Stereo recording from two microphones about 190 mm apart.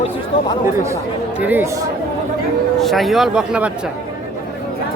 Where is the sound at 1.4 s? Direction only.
10° right (ahead or behind).